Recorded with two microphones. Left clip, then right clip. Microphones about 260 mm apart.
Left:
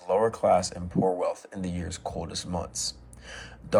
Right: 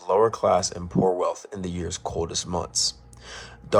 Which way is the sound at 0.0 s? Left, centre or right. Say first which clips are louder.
Right 4 dB; right.